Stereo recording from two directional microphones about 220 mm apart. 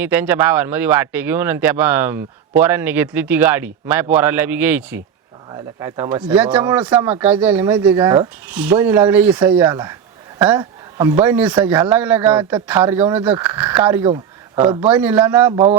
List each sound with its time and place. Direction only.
0.0 s a man's voice: 10° right (ahead or behind)
14.1 s a sound: 25° right (ahead or behind)
14.8 s speech: 5° right (ahead or behind)